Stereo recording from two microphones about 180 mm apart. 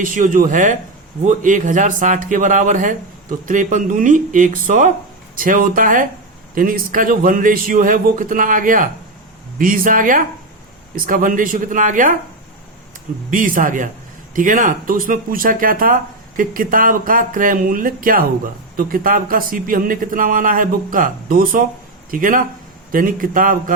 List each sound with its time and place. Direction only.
0.0 s speech: 45° right (ahead or behind)
13.3 s speech: 50° right (ahead or behind)